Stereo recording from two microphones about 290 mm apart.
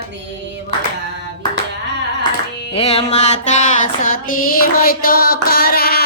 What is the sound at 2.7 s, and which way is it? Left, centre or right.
Music, left.